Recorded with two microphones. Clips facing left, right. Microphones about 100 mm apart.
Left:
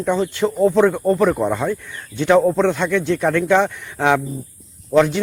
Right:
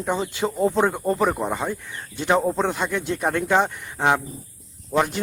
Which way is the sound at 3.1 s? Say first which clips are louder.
Left 4 dB; 35° right (ahead or behind).